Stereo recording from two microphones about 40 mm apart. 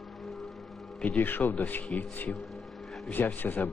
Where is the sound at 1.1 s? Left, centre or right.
Left.